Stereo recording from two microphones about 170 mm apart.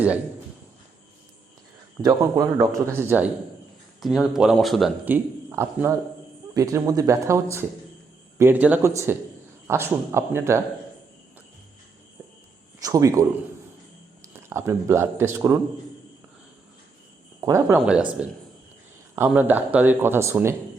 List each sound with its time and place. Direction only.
2.0 s speech: 20° right (ahead or behind)
4.0 s a man's voice: centre (ahead or behind)
12.8 s speech: 20° right (ahead or behind)
14.3 s speech: 15° right (ahead or behind)
17.4 s speech: 15° right (ahead or behind)
17.7 s a man's voice: 5° right (ahead or behind)
19.1 s speech: 10° right (ahead or behind)